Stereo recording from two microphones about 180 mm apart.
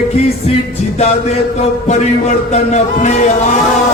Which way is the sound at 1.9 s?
40° left (ahead or behind).